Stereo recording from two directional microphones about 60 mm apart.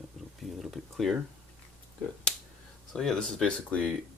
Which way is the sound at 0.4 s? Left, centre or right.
Centre.